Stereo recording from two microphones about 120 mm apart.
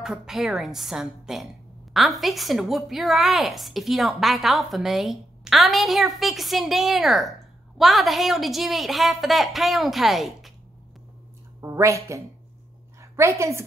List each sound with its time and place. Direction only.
0.0 s a woman's voice: 5° right (ahead or behind)
11.6 s a woman's voice: 25° right (ahead or behind)